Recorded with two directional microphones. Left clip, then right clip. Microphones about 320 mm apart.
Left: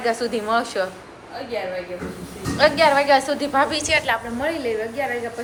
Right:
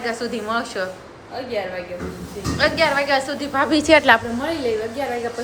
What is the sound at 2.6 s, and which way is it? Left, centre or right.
A woman's voice, centre.